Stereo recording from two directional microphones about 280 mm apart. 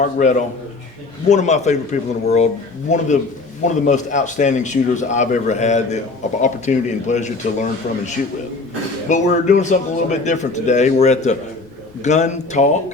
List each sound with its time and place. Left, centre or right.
0.0 s a man's voice: left